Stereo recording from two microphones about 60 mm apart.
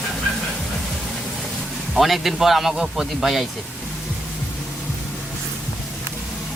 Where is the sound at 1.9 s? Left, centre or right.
Centre.